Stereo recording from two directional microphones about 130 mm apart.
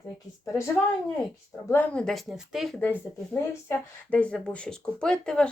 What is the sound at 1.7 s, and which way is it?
Speech, 15° left (ahead or behind).